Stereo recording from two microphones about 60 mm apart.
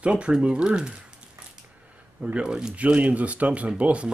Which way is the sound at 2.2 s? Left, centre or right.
Centre.